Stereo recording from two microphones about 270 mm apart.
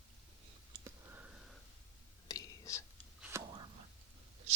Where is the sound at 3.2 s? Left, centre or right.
Centre.